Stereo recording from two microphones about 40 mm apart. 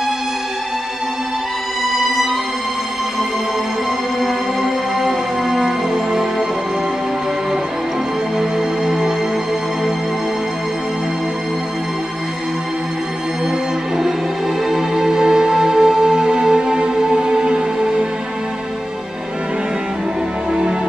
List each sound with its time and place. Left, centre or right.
5.0 s music: centre
8.4 s music: centre
14.7 s music: centre